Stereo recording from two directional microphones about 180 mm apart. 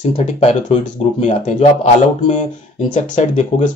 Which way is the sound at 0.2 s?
40° left (ahead or behind).